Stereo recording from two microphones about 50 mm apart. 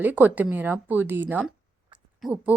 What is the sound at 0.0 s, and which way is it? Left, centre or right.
A woman's voice, right.